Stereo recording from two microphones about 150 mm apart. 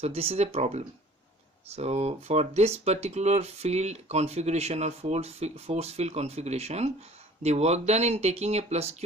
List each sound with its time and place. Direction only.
0.0 s speech: 40° right (ahead or behind)